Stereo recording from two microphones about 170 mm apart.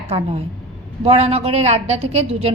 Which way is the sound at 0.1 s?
35° right (ahead or behind).